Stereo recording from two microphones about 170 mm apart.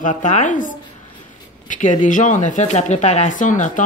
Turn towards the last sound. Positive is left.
turn(degrees=50)  # may be behind; listen again after turning